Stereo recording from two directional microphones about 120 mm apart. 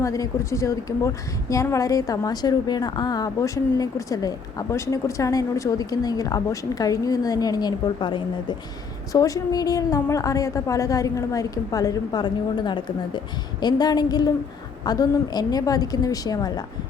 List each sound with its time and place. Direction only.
0.0 s a woman's voice: 25° left (ahead or behind)
9.1 s a woman's voice: 30° left (ahead or behind)